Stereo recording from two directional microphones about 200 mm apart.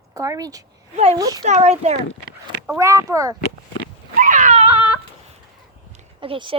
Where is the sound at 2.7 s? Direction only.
15° right (ahead or behind).